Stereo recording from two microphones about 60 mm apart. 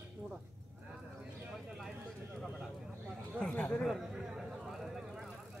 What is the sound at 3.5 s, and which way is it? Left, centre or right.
Speech, left.